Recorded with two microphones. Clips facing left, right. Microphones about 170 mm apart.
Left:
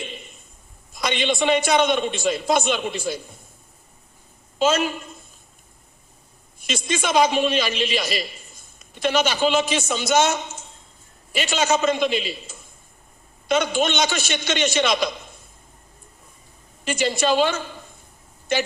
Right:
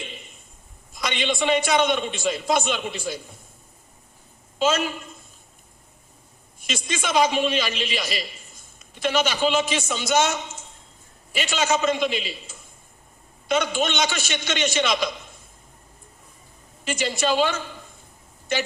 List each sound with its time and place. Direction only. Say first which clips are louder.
1.0 s a man's voice: left 3 dB; 40° left (ahead or behind)
6.7 s a man's voice: left 3 dB; 40° left (ahead or behind)
11.3 s a man's voice: left 2 dB; 40° left (ahead or behind)
13.5 s a man's voice: left 2 dB; 40° left (ahead or behind)
16.8 s a man's voice: left 3 dB; 45° left (ahead or behind)